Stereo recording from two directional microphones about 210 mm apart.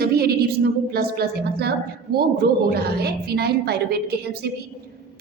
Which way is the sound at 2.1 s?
50° right (ahead or behind).